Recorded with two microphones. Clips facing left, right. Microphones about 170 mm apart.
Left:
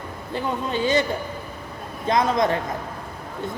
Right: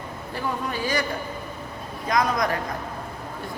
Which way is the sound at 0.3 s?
25° left (ahead or behind).